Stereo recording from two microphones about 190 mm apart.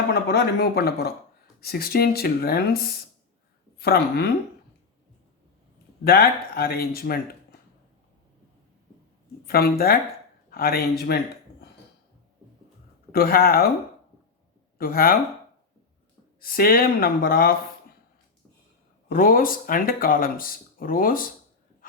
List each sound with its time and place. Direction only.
0.1 s speech: 60° left (ahead or behind)
6.1 s speech: 55° left (ahead or behind)
9.5 s speech: 55° left (ahead or behind)
13.1 s speech: 50° left (ahead or behind)
14.8 s speech: 50° left (ahead or behind)
16.4 s speech: 50° left (ahead or behind)
19.0 s speech: 50° left (ahead or behind)